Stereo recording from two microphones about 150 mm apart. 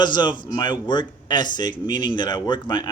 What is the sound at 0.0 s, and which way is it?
A man's voice, 30° left (ahead or behind).